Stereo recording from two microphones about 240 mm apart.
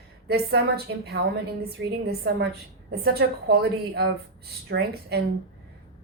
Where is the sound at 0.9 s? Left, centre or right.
Right.